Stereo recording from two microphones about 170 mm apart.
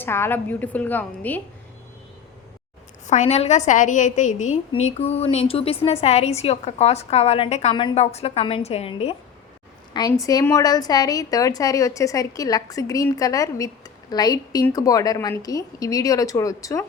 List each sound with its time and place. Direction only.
0.0 s a woman's voice: 15° left (ahead or behind)
3.1 s a woman's voice: 40° left (ahead or behind)
9.9 s a woman's voice: 20° left (ahead or behind)